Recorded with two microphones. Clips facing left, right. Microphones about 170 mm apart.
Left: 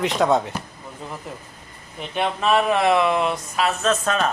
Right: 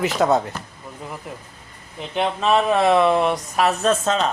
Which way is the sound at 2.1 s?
25° right (ahead or behind).